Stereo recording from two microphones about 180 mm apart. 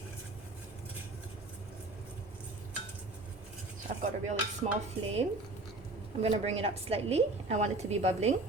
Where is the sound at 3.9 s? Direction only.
50° right (ahead or behind).